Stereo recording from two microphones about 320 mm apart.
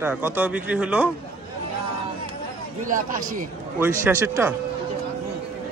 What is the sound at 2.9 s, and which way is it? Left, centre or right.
Speech, right.